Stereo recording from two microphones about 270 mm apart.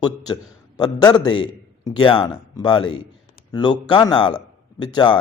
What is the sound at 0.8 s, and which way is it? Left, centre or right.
Speech, centre.